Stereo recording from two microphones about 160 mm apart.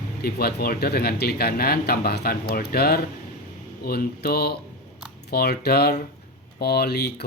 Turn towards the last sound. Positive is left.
turn(degrees=90)